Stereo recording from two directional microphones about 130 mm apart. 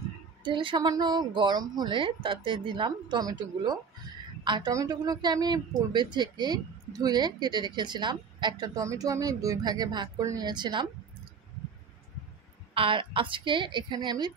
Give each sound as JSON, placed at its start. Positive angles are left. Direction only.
{"t": 0.4, "sound": "a woman's voice", "side_deg": -40}
{"t": 12.7, "sound": "a woman's voice", "side_deg": -45}